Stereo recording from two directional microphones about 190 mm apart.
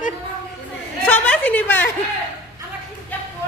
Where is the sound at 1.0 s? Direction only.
10° left (ahead or behind).